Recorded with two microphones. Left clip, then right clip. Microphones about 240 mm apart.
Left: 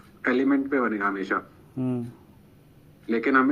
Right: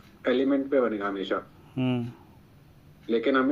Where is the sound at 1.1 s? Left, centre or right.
Centre.